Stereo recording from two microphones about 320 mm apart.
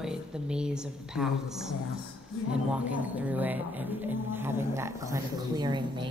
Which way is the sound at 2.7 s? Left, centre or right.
Centre.